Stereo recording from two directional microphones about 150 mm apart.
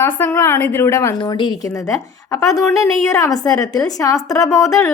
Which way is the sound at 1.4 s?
30° left (ahead or behind).